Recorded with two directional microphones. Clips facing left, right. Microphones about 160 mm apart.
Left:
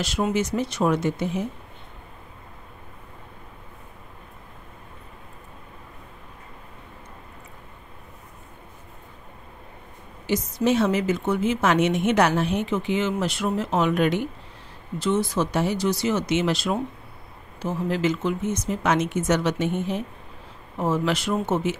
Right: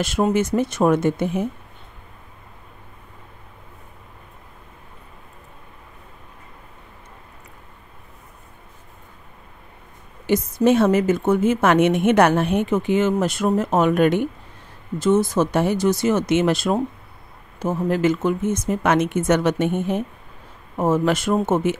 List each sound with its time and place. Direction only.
0.0 s a woman's voice: 50° right (ahead or behind)
10.2 s a woman's voice: 55° right (ahead or behind)